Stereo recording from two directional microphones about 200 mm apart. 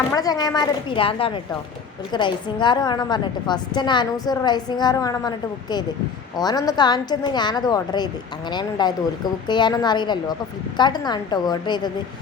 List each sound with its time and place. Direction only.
0.1 s a woman's voice: 20° left (ahead or behind)
6.3 s a woman's voice: 20° left (ahead or behind)